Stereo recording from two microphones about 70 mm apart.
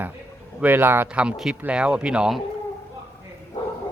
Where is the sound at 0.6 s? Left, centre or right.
Right.